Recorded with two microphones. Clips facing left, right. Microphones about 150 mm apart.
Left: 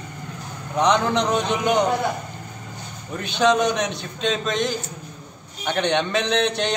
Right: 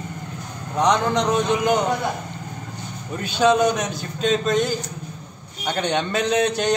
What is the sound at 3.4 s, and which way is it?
A man's voice, 5° right (ahead or behind).